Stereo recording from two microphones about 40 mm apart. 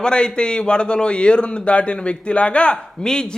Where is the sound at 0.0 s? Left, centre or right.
Left.